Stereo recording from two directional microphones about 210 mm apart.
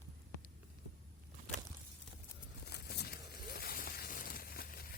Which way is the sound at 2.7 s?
50° left (ahead or behind).